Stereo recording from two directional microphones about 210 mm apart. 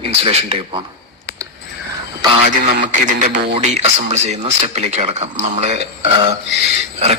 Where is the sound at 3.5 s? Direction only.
30° right (ahead or behind).